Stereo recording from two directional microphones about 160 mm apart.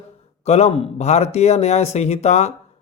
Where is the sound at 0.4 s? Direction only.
45° left (ahead or behind).